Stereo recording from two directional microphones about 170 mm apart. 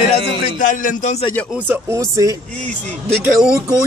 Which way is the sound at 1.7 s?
15° right (ahead or behind).